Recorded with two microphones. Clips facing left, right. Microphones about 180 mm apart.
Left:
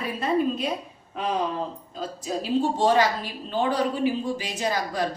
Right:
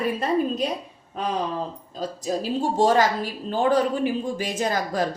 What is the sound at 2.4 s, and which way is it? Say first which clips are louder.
Speech: even; 40° right (ahead or behind).